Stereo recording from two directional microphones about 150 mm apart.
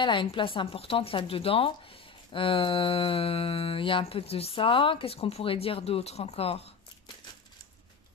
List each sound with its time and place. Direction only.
0.0 s speech: 35° left (ahead or behind)